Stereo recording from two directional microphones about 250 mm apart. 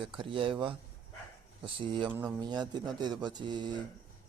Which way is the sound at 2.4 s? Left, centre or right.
Centre.